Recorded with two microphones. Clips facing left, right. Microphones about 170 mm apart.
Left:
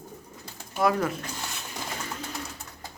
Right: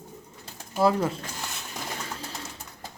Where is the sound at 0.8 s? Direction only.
25° right (ahead or behind).